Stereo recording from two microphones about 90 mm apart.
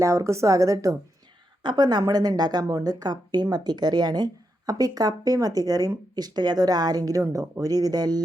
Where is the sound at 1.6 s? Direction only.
55° right (ahead or behind).